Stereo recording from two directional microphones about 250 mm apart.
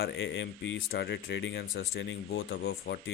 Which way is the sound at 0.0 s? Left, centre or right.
Left.